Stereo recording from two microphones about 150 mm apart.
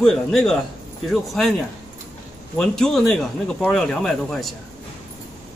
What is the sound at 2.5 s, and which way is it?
Speech, 5° left (ahead or behind).